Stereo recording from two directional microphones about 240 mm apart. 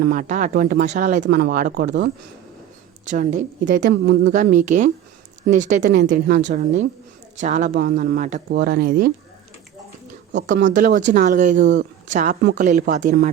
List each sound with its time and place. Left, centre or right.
0.0 s speech: right
3.1 s speech: right
10.7 s speech: right
11.6 s speech: right
12.0 s speech: right